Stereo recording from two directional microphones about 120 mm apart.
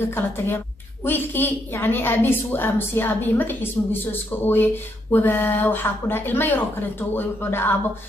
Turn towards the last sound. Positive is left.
turn(degrees=20)  # may be behind; listen again after turning